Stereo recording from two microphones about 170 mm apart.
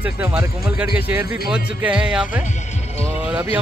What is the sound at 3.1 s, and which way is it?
Vehicle, 10° right (ahead or behind).